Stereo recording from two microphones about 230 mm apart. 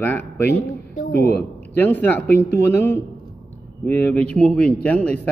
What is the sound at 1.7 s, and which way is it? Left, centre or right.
Speech, centre.